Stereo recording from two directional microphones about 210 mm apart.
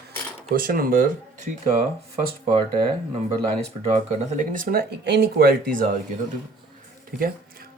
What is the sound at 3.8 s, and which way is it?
Speech, 30° right (ahead or behind).